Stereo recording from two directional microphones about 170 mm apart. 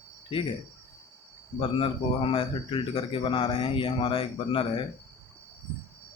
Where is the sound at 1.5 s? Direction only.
30° left (ahead or behind).